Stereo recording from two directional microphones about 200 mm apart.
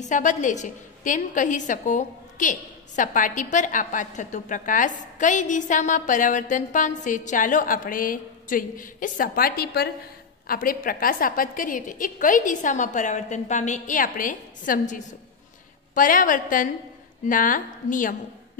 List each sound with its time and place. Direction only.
0.0 s a woman's voice: 40° left (ahead or behind)